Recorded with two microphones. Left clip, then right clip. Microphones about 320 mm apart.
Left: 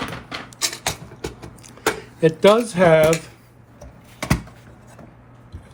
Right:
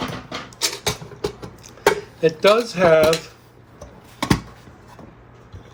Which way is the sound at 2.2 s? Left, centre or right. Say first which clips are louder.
Left 1 dB; centre.